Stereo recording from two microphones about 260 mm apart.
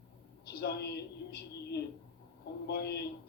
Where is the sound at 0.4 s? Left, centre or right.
Left.